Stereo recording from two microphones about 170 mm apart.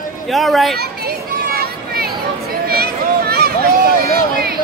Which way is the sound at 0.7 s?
65° right (ahead or behind).